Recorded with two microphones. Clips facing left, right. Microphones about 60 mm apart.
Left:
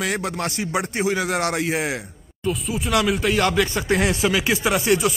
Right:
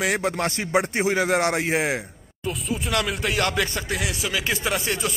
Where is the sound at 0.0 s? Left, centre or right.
Right.